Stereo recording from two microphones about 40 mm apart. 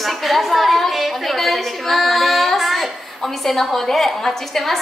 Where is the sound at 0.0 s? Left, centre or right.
Centre.